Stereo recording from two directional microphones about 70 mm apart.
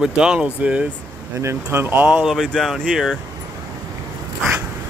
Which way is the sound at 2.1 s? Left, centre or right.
Centre.